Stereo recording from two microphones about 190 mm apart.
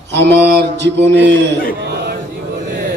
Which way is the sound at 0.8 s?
70° right (ahead or behind).